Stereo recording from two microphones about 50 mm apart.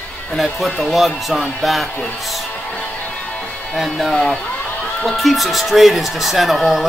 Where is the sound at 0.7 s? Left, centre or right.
Centre.